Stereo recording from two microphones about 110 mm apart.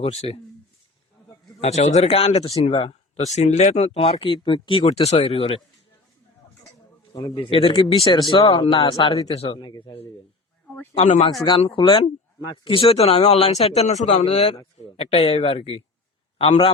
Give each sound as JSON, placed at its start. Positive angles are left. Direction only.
{"t": 0.0, "sound": "speech", "side_deg": 70}
{"t": 1.6, "sound": "speech", "side_deg": 85}
{"t": 4.9, "sound": "speech", "side_deg": 80}
{"t": 7.1, "sound": "a man's voice", "side_deg": 40}
{"t": 7.5, "sound": "a man's voice", "side_deg": 55}
{"t": 10.9, "sound": "speech", "side_deg": 65}
{"t": 11.7, "sound": "speech", "side_deg": 50}
{"t": 14.8, "sound": "speech", "side_deg": 70}